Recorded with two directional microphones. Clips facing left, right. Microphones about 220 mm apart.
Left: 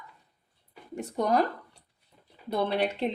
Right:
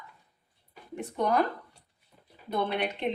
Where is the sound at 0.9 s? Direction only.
40° left (ahead or behind).